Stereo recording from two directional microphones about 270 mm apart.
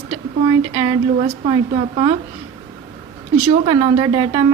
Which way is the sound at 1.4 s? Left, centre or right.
Centre.